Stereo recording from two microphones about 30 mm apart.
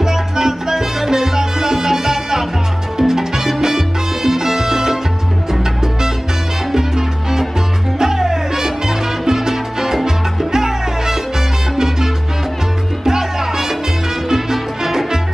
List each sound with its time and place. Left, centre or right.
0.0 s music: centre
3.0 s salsa music: centre
8.0 s salsa music: centre
13.0 s music: centre